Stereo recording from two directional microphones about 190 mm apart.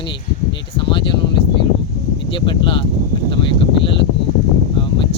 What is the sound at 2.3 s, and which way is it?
Speech, 25° left (ahead or behind).